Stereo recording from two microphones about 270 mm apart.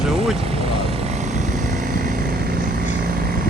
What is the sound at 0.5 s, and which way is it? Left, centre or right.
Vehicle, right.